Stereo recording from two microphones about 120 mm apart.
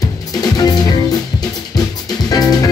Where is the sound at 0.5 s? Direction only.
35° left (ahead or behind).